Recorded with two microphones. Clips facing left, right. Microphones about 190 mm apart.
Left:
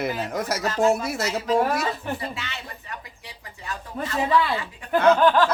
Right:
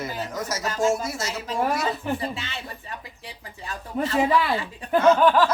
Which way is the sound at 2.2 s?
30° right (ahead or behind).